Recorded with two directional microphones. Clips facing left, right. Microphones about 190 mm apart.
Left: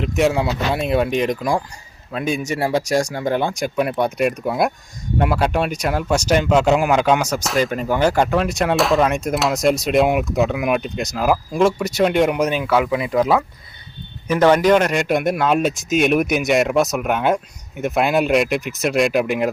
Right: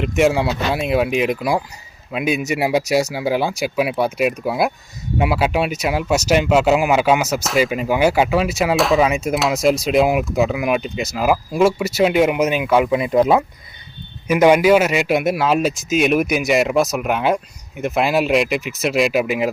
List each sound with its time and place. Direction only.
0.0 s speech: centre (ahead or behind); by 13.4 s 20° right (ahead or behind)
14.3 s speech: 10° right (ahead or behind)